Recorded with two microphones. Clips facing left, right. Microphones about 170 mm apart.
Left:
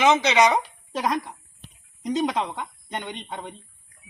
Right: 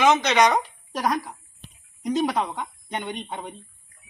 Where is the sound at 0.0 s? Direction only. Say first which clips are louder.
Even; 5° left (ahead or behind).